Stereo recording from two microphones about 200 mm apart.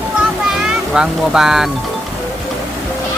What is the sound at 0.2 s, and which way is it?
Music, 5° right (ahead or behind).